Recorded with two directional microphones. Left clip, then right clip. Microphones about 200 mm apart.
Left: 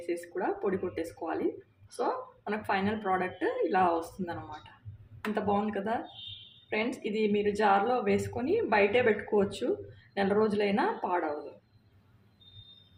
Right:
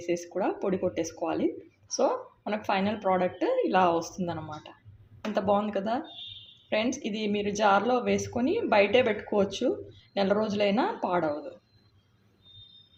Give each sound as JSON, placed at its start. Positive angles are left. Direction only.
{"t": 0.0, "sound": "a woman's voice", "side_deg": -30}